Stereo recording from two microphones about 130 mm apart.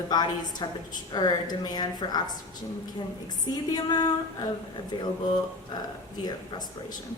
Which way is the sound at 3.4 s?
30° left (ahead or behind).